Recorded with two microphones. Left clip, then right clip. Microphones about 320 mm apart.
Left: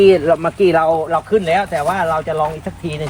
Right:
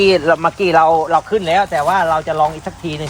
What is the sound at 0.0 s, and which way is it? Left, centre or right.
Speech, centre.